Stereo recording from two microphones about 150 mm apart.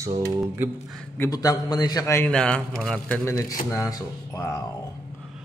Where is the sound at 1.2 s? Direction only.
25° left (ahead or behind).